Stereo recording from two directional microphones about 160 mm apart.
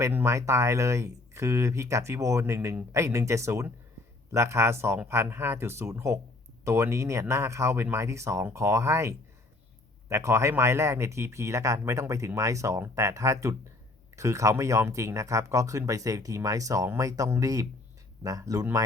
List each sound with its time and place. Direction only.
0.0 s speech: 15° right (ahead or behind)